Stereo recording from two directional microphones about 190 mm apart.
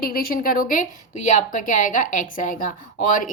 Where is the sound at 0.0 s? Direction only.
50° left (ahead or behind).